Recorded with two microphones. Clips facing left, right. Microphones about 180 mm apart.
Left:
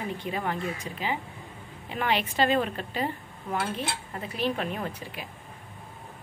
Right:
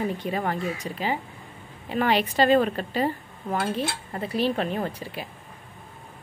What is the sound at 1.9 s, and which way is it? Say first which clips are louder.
A woman's voice: right 5 dB; 40° right (ahead or behind).